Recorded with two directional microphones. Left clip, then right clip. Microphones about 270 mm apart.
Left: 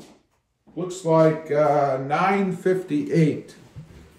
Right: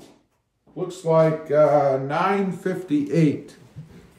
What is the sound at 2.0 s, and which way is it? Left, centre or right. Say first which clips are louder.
A man's voice: left 1 dB; centre.